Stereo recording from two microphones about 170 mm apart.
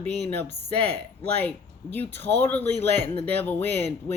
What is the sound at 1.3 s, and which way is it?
A man's voice, 10° left (ahead or behind).